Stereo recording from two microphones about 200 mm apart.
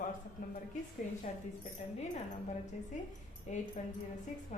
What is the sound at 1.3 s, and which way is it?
Speech, 35° left (ahead or behind).